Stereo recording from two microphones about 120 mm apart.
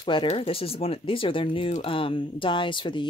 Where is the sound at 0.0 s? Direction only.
45° left (ahead or behind).